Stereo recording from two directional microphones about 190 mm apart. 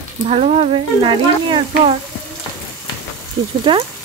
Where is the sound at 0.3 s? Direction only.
30° right (ahead or behind).